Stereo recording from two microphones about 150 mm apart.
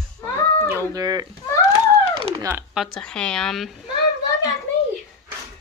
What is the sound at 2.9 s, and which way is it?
Speech, 5° left (ahead or behind).